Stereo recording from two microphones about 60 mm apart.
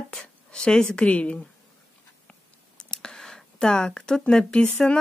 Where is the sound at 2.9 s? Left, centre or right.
Centre.